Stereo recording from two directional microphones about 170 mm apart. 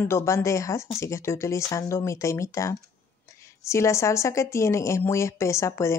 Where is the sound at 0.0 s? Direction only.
15° left (ahead or behind).